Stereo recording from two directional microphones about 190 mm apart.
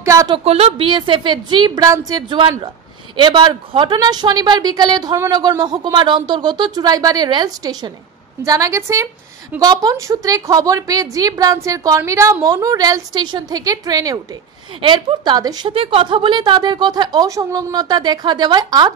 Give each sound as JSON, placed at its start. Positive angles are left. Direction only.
{"t": 0.0, "sound": "a woman's voice", "side_deg": -15}
{"t": 0.4, "sound": "a woman's voice", "side_deg": -30}